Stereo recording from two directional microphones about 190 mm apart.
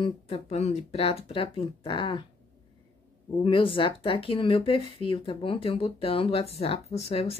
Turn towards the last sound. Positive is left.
turn(degrees=30)  # may be behind; listen again after turning